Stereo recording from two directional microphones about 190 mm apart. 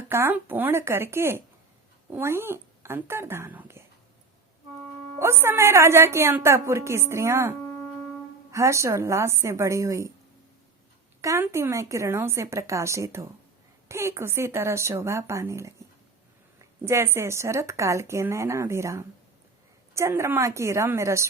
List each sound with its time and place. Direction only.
0.1 s a woman's voice: 10° right (ahead or behind)
5.2 s a woman's voice: 15° right (ahead or behind)
11.2 s a woman's voice: 15° right (ahead or behind)
16.8 s a woman's voice: 15° right (ahead or behind)